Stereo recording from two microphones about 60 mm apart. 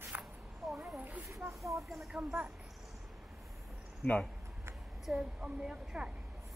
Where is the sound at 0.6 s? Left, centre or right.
Centre.